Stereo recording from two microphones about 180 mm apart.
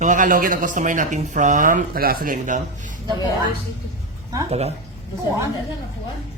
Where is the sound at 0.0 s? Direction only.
45° right (ahead or behind).